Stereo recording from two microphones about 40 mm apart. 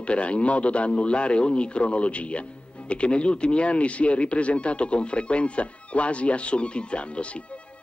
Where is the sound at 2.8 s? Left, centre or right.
Left.